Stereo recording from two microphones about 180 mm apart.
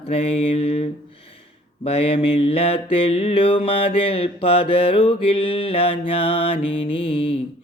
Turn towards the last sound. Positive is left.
turn(degrees=25)  # may be behind; listen again after turning